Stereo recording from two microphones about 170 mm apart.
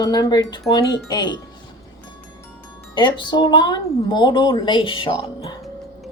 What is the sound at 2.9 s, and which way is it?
A woman's voice, 25° left (ahead or behind).